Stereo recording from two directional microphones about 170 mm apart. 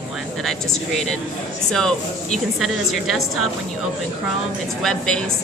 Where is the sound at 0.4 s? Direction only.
Centre (ahead or behind).